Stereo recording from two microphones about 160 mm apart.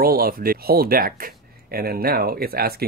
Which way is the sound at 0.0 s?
65° right (ahead or behind).